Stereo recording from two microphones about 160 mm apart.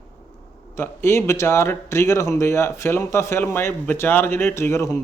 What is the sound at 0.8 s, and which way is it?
Speech, 15° left (ahead or behind).